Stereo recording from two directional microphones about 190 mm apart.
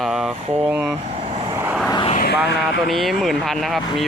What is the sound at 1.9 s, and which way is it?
Vehicle, 25° left (ahead or behind).